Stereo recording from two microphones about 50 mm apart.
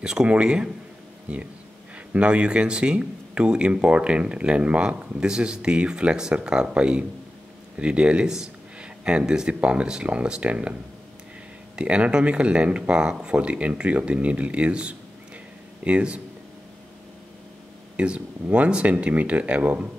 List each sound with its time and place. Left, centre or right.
0.0 s speech: centre
17.9 s speech: right